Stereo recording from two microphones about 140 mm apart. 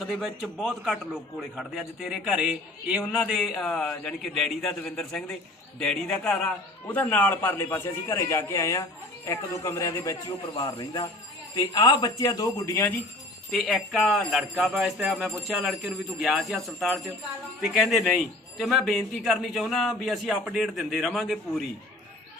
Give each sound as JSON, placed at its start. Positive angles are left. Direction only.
{"t": 0.0, "sound": "a man's voice", "side_deg": 0}
{"t": 13.5, "sound": "a man's voice", "side_deg": 0}